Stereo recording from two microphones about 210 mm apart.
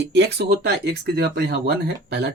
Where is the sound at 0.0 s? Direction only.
55° right (ahead or behind).